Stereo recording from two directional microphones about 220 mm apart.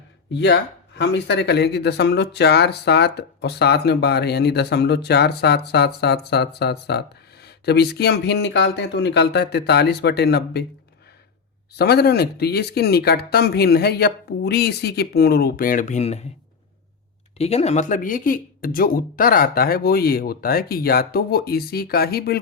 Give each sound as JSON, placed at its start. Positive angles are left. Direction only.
{"t": 0.3, "sound": "speech", "side_deg": 50}
{"t": 11.7, "sound": "speech", "side_deg": 45}
{"t": 17.3, "sound": "speech", "side_deg": 30}